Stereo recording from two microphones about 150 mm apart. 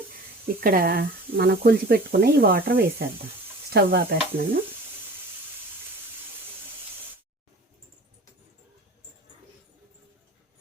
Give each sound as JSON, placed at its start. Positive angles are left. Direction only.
{"t": 0.4, "sound": "speech", "side_deg": -75}